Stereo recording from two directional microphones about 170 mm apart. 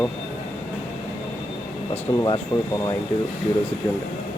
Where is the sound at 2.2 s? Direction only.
25° left (ahead or behind).